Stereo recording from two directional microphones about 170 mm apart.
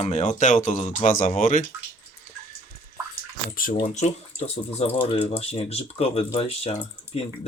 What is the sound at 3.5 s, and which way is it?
Speech, 55° left (ahead or behind).